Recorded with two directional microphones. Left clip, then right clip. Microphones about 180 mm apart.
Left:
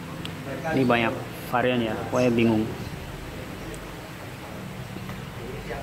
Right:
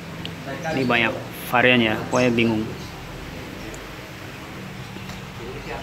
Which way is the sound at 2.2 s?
Centre (ahead or behind).